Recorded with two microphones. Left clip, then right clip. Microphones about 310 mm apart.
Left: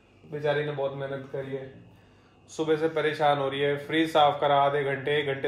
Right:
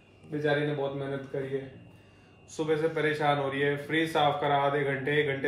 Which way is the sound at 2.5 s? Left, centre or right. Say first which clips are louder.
Left 2 dB; centre.